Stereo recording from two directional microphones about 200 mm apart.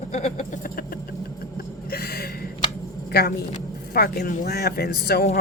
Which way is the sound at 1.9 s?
50° left (ahead or behind).